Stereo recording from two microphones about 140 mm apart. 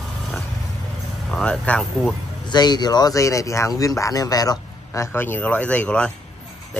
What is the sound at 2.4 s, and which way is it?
Speech, 30° left (ahead or behind).